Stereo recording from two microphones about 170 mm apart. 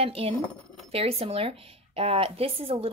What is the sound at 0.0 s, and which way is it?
A woman's voice, 35° right (ahead or behind).